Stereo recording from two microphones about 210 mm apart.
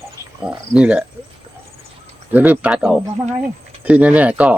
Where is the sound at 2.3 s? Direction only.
10° right (ahead or behind).